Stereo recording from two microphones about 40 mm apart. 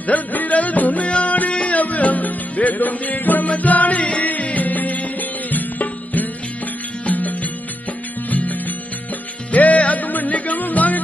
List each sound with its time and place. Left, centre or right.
0.0 s music: left